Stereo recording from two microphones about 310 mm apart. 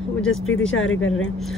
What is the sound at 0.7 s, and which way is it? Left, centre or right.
Speech, left.